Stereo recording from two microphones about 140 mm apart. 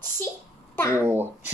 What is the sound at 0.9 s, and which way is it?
Speech, 15° right (ahead or behind).